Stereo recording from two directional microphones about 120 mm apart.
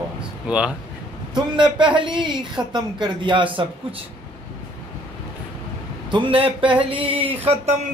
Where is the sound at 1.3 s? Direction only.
40° right (ahead or behind).